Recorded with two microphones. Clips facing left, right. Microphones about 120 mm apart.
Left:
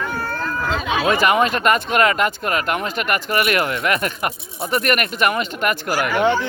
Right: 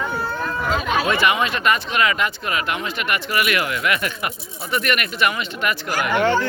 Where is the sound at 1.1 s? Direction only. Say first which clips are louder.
Left 3 dB; 45° left (ahead or behind).